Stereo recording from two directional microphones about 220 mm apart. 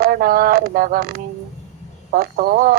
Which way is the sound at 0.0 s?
40° right (ahead or behind).